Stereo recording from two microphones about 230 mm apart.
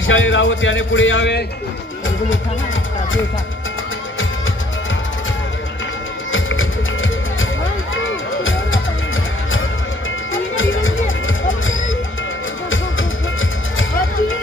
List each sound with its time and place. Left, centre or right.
0.0 s speech: left
6.3 s music: left
10.3 s music: left